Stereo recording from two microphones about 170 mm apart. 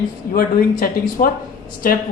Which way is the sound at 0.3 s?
60° left (ahead or behind).